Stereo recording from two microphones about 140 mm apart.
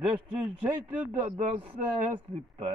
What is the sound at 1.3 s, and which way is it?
Speech, 45° right (ahead or behind).